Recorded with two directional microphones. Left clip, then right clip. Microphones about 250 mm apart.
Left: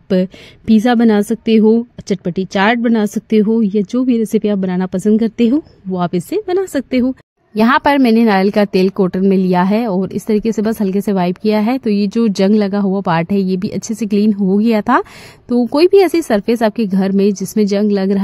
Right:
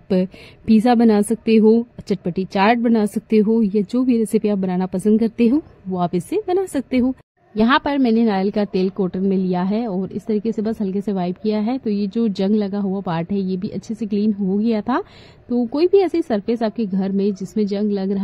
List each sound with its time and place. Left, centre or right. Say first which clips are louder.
0.1 s speech: left 5 dB; left
7.5 s a woman's voice: left 6 dB; left